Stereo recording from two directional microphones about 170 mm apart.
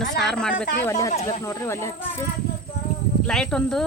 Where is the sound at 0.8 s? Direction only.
20° left (ahead or behind).